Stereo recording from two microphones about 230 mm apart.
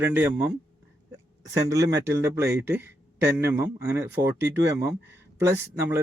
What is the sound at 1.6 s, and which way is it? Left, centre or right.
A man's voice, centre.